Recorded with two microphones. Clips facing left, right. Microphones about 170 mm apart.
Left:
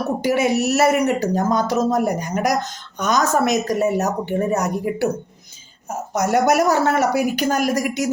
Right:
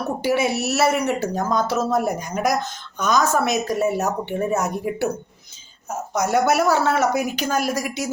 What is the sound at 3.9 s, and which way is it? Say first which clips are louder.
Speech: left 3 dB; 45° left (ahead or behind).